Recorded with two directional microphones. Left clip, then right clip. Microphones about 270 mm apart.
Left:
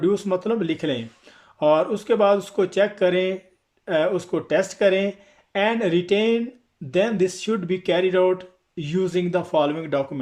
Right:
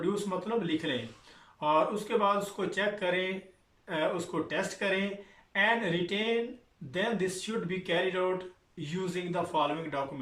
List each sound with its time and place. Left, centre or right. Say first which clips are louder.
0.1 s speech: left 9 dB; left